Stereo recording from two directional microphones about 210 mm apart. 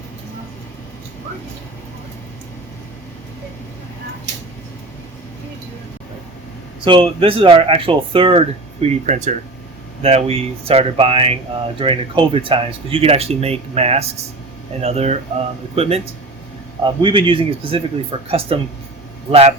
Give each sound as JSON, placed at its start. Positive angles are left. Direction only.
{"t": 6.8, "sound": "speech", "side_deg": -25}